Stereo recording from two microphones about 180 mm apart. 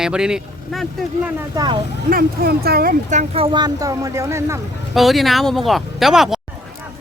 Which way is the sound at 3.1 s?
40° right (ahead or behind).